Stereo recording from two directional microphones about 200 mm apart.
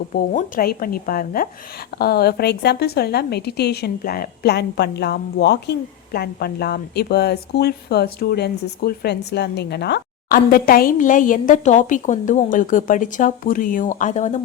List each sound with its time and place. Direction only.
0.1 s a woman's voice: 45° left (ahead or behind)